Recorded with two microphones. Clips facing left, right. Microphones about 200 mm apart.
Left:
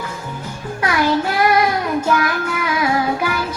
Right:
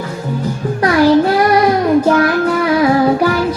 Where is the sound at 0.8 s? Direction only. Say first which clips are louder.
Right 8 dB; 35° right (ahead or behind).